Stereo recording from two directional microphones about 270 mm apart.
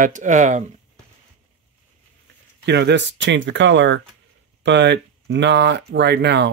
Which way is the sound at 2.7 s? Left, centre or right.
Right.